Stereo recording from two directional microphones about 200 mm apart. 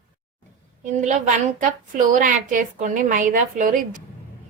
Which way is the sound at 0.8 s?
40° right (ahead or behind).